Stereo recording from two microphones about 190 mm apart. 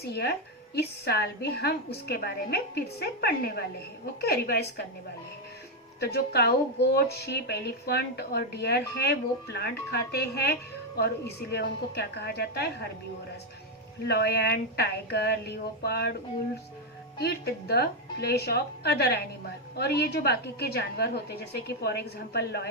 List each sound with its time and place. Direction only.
0.1 s speech: 55° left (ahead or behind)
6.0 s speech: 55° left (ahead or behind)
14.1 s speech: 55° left (ahead or behind)
17.2 s speech: 60° left (ahead or behind)